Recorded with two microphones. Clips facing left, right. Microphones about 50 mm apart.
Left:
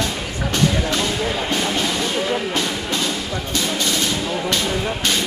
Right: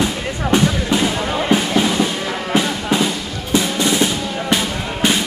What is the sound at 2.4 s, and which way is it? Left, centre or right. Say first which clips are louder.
Music: right 4 dB; centre.